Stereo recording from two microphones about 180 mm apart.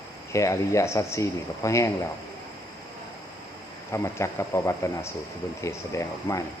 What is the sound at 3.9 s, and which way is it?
Speech, 15° left (ahead or behind).